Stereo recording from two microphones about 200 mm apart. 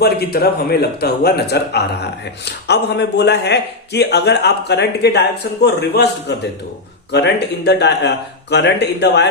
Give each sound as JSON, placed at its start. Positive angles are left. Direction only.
{"t": 0.0, "sound": "a man's voice", "side_deg": 50}